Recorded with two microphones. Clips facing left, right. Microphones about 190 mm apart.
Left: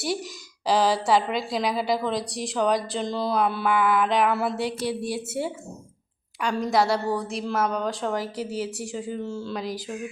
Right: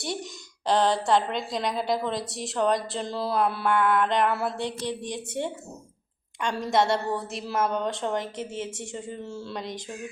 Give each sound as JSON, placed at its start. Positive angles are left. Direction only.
{"t": 0.0, "sound": "a woman's voice", "side_deg": 0}